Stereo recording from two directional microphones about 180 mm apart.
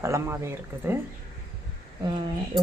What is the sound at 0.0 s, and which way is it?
Speech, 15° right (ahead or behind).